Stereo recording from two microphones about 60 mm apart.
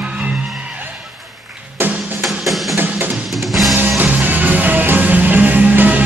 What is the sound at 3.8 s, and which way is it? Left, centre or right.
Music, right.